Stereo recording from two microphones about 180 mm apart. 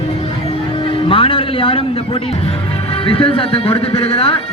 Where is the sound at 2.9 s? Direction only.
30° left (ahead or behind).